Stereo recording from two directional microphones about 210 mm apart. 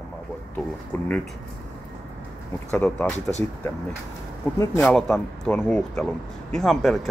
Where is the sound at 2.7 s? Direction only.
10° left (ahead or behind).